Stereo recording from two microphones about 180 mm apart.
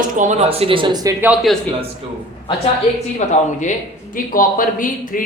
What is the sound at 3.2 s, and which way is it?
Speech, 40° left (ahead or behind).